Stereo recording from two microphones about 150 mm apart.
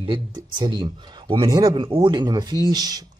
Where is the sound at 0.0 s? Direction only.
35° right (ahead or behind).